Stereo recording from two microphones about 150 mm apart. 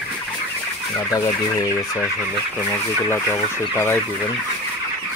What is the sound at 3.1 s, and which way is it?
Speech, 15° left (ahead or behind).